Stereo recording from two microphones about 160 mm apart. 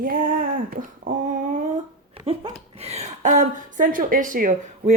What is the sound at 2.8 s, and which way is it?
Speech, 40° right (ahead or behind).